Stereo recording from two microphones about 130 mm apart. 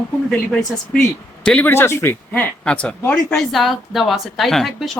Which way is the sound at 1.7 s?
20° left (ahead or behind).